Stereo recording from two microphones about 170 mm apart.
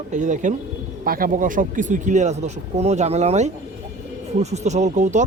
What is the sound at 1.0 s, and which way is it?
Speech, 60° right (ahead or behind).